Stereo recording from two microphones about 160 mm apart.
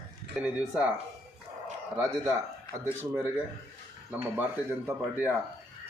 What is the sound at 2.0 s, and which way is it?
Speech, 20° right (ahead or behind).